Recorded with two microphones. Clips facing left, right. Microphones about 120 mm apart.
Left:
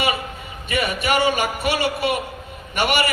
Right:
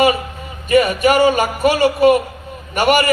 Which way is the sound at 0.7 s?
40° right (ahead or behind).